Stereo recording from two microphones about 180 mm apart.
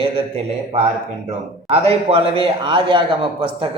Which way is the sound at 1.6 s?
35° right (ahead or behind).